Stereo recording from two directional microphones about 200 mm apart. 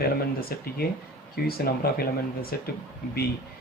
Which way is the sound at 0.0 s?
50° left (ahead or behind).